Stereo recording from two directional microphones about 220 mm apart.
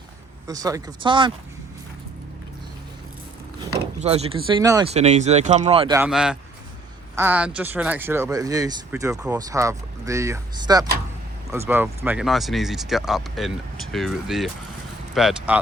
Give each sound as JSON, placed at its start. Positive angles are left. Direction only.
{"t": 0.4, "sound": "speech", "side_deg": -15}
{"t": 4.0, "sound": "speech", "side_deg": -30}
{"t": 4.9, "sound": "speech", "side_deg": -30}
{"t": 6.0, "sound": "speech", "side_deg": -5}